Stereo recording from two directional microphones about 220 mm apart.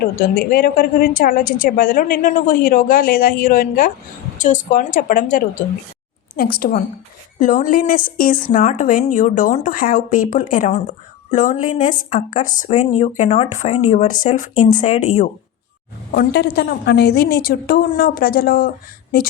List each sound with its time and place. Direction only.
0.0 s a woman's voice: 40° left (ahead or behind)
16.1 s a woman's voice: 50° left (ahead or behind)